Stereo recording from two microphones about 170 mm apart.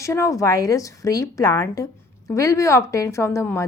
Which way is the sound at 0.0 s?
20° left (ahead or behind).